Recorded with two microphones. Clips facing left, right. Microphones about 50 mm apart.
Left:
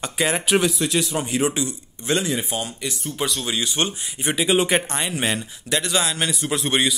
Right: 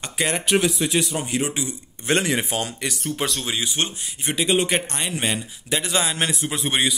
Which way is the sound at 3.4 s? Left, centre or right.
Centre.